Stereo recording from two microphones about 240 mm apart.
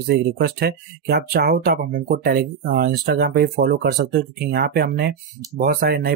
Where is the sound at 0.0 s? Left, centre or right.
Right.